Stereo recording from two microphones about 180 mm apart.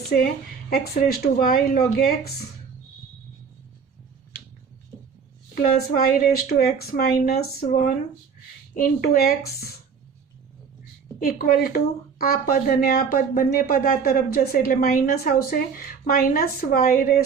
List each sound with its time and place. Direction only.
0.9 s a woman's voice: 55° left (ahead or behind)
5.5 s a woman's voice: 55° left (ahead or behind)
8.7 s a woman's voice: 55° left (ahead or behind)
11.2 s a woman's voice: 55° left (ahead or behind)